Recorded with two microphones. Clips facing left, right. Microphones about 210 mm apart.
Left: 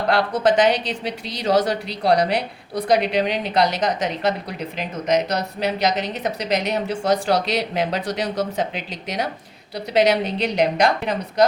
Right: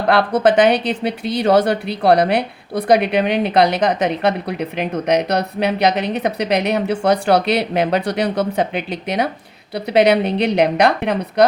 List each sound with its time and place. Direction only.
0.1 s a woman's voice: 60° right (ahead or behind)